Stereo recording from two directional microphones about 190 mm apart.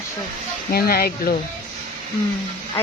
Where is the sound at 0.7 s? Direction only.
55° left (ahead or behind).